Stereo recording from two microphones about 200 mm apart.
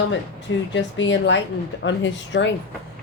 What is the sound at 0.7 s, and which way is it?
A woman's voice, 65° left (ahead or behind).